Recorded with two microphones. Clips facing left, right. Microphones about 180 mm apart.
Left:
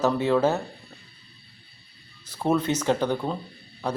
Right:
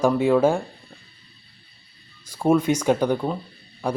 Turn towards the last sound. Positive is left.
turn(degrees=-10)  # may be behind; listen again after turning